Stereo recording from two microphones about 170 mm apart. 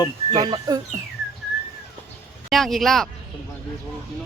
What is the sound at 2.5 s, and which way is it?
Speech, centre (ahead or behind).